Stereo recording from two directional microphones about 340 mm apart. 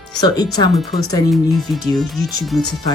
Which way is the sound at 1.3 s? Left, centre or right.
Centre.